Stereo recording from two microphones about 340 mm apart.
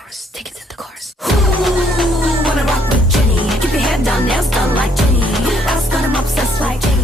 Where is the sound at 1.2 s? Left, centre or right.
Centre.